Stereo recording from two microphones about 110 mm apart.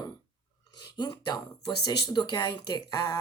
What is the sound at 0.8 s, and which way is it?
Speech, 40° left (ahead or behind).